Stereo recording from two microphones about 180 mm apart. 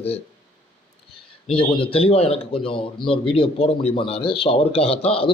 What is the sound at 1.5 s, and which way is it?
Speech, 30° left (ahead or behind).